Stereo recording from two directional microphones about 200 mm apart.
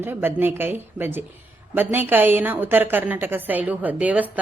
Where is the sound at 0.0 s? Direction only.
10° right (ahead or behind).